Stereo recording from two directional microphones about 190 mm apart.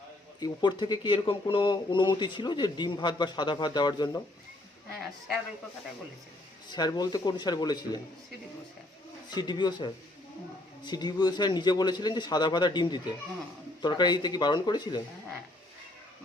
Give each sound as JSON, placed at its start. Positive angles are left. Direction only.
{"t": 0.3, "sound": "speech", "side_deg": 20}
{"t": 6.7, "sound": "speech", "side_deg": 20}
{"t": 9.3, "sound": "speech", "side_deg": 20}